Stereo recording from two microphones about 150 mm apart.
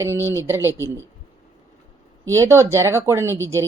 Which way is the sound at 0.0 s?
15° right (ahead or behind).